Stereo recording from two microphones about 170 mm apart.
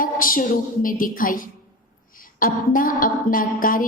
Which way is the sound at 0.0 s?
55° left (ahead or behind).